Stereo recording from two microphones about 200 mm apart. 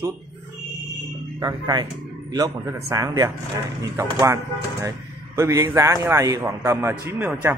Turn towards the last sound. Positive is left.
turn(degrees=-10)  # may be behind; listen again after turning